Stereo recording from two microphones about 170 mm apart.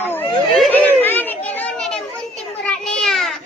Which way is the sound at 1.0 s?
10° left (ahead or behind).